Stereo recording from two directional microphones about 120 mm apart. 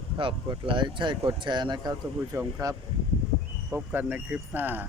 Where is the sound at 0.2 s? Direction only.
40° right (ahead or behind).